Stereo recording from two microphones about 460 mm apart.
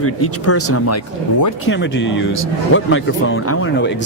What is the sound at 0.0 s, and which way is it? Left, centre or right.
Speech, left.